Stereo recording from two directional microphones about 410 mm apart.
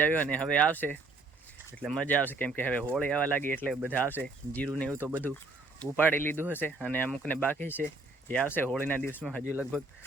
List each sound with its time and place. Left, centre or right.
0.0 s speech: centre